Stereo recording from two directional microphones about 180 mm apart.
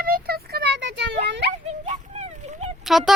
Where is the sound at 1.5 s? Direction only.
40° right (ahead or behind).